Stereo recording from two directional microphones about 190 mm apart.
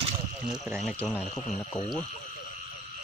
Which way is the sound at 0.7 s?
Centre (ahead or behind).